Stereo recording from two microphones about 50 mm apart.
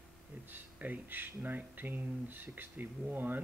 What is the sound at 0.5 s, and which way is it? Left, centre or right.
Speech, right.